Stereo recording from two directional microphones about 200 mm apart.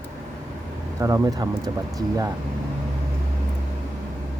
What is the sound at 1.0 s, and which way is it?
Speech, 15° right (ahead or behind).